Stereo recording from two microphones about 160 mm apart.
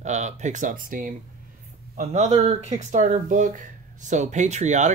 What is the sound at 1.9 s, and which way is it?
Speech, 45° right (ahead or behind).